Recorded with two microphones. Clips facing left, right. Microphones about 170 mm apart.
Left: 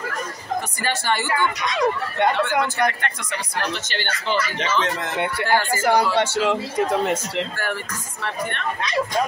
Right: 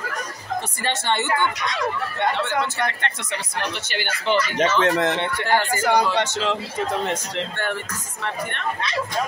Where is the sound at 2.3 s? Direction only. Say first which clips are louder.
Left 2 dB; 25° right (ahead or behind).